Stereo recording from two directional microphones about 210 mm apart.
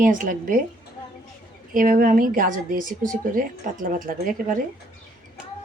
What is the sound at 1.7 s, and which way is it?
A woman's voice, 40° right (ahead or behind).